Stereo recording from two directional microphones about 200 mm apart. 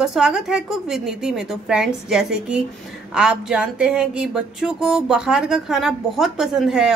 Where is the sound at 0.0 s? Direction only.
Centre (ahead or behind).